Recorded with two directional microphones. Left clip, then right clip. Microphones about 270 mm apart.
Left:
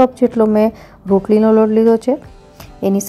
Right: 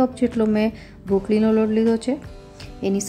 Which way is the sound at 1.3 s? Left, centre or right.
Centre.